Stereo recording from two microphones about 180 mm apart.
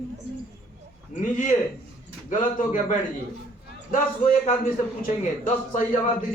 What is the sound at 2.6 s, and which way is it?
A man's voice, 40° left (ahead or behind).